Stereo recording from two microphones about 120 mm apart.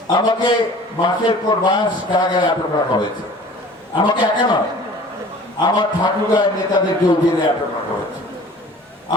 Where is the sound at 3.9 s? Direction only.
40° left (ahead or behind).